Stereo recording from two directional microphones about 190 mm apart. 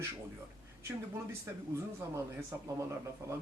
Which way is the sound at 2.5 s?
15° right (ahead or behind).